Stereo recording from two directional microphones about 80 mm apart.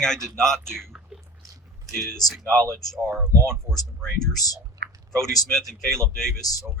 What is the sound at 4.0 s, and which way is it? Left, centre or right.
Speech, centre.